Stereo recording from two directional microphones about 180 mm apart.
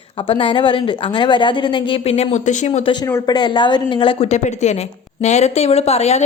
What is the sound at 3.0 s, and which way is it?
A woman's voice, 20° left (ahead or behind).